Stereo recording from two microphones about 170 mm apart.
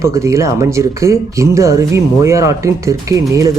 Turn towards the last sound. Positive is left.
turn(degrees=-20)  # may be behind; listen again after turning